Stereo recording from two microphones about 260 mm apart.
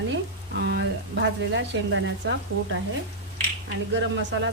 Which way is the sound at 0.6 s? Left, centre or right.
Right.